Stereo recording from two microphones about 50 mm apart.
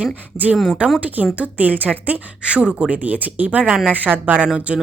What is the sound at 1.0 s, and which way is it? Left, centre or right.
Speech, right.